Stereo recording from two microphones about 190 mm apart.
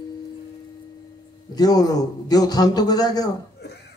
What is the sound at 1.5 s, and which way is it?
Speech, 20° left (ahead or behind).